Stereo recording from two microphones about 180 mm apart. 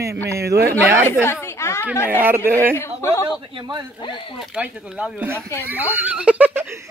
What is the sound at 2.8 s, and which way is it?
Speech, 15° left (ahead or behind).